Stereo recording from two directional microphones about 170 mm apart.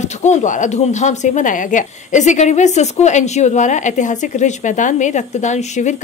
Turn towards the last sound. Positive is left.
turn(degrees=45)  # may be behind; listen again after turning